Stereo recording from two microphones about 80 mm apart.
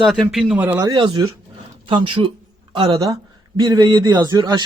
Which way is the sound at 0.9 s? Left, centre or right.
Right.